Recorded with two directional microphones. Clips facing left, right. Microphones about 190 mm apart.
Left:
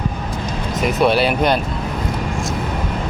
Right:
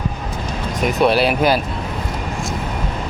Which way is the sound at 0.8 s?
Centre (ahead or behind).